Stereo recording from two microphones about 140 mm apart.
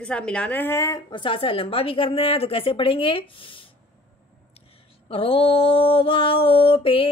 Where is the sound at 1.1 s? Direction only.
35° left (ahead or behind).